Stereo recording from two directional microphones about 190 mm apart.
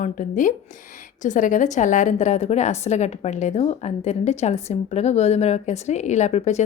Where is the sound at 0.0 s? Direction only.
45° left (ahead or behind).